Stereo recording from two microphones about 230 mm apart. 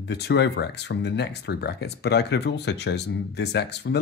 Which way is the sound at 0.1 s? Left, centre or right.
Left.